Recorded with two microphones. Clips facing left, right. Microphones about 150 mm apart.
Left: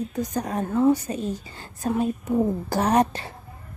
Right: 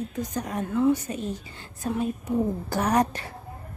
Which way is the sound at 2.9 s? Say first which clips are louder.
Left 2 dB; 25° left (ahead or behind).